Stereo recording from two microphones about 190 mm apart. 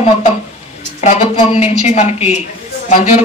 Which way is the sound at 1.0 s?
35° left (ahead or behind).